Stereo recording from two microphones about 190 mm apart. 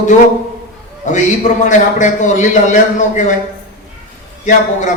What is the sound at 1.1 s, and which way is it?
A man's voice, 40° left (ahead or behind).